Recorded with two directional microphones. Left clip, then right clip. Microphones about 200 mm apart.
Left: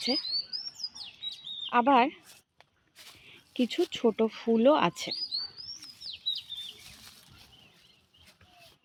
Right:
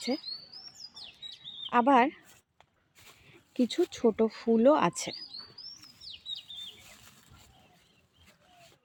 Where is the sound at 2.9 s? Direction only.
5° right (ahead or behind).